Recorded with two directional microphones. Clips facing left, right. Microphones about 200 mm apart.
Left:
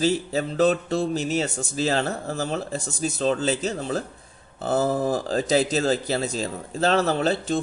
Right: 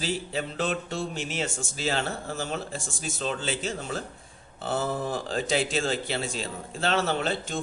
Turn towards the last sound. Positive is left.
turn(degrees=35)  # may be behind; listen again after turning